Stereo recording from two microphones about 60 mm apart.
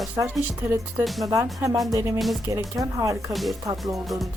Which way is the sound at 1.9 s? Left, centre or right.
Right.